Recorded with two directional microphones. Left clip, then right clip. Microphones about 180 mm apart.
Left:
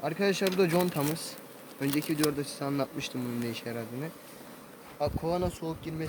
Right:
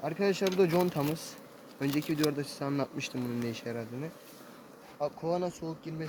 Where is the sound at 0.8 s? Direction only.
30° right (ahead or behind).